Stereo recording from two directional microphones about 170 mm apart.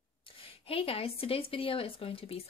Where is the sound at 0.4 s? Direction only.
35° left (ahead or behind).